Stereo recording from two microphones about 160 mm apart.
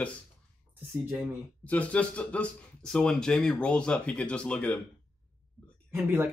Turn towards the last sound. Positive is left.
turn(degrees=-15)  # may be behind; listen again after turning